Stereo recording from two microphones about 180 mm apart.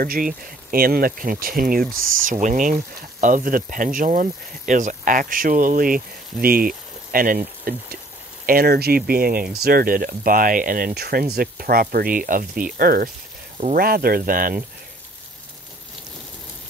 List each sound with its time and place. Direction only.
0.0 s speech: 55° right (ahead or behind)